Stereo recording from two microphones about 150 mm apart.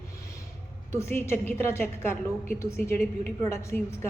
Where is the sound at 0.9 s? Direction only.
15° left (ahead or behind).